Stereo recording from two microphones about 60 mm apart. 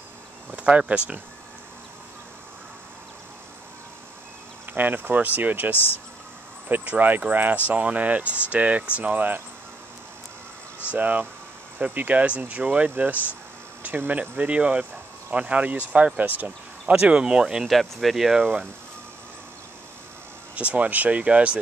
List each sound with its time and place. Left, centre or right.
0.5 s speech: right
4.7 s speech: right
11.0 s speech: right
17.0 s speech: centre
17.6 s speech: centre
20.5 s speech: right